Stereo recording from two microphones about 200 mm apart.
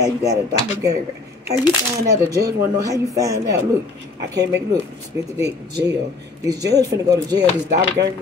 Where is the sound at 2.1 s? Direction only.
15° right (ahead or behind).